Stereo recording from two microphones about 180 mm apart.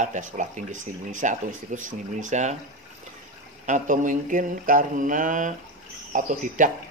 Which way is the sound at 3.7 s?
45° right (ahead or behind).